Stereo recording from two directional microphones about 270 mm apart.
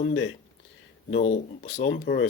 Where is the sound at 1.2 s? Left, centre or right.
Left.